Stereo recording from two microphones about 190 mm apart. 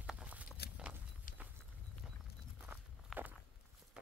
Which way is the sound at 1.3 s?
45° left (ahead or behind).